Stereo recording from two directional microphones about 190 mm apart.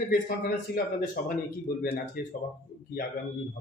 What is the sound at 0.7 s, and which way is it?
Speech, 55° left (ahead or behind).